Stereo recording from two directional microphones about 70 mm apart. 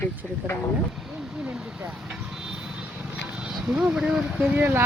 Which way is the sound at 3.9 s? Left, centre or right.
Centre.